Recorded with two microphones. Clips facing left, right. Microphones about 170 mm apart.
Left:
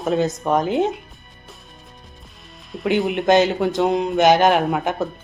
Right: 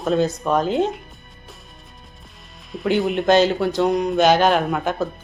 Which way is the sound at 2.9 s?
15° left (ahead or behind).